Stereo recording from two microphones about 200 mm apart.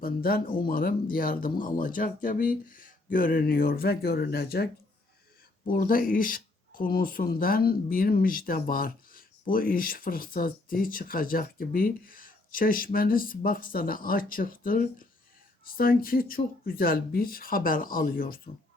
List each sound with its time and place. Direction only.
0.0 s speech: 45° left (ahead or behind)